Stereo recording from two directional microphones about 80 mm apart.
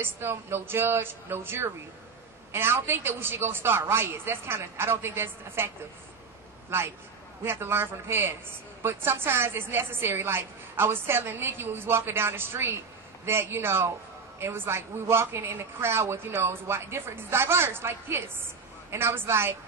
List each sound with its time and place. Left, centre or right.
0.0 s a woman's voice: right
7.4 s a woman's voice: right